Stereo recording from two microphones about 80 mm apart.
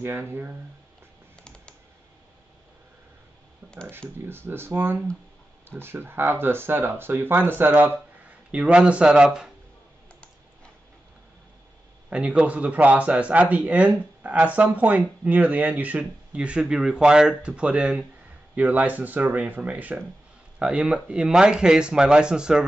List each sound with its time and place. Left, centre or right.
0.0 s speech: right
3.6 s speech: right; by 9.5 s centre
12.1 s speech: centre